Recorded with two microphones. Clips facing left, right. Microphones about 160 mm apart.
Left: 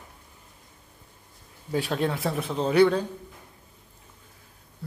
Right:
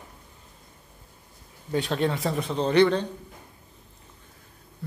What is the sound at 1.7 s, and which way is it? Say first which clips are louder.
Speech: right 1 dB; centre (ahead or behind).